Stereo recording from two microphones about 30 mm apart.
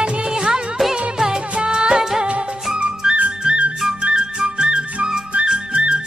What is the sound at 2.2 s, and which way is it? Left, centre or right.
Music, right.